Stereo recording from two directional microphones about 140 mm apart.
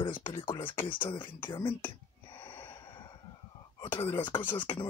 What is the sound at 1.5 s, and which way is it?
Whispering, 35° left (ahead or behind).